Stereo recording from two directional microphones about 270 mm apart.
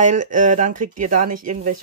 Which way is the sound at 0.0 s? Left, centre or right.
Right.